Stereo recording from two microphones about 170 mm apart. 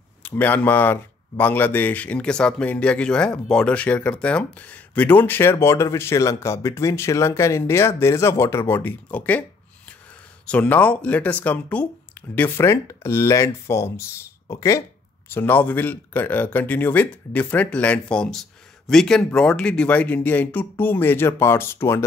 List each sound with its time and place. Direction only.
0.2 s speech: 10° left (ahead or behind)
10.4 s speech: 5° left (ahead or behind)